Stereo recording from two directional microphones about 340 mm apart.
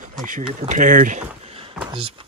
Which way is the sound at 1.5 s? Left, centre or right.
Centre.